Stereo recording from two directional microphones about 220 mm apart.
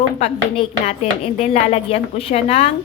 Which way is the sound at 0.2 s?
30° left (ahead or behind).